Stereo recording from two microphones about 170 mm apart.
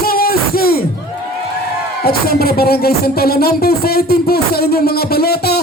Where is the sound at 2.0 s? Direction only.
65° left (ahead or behind).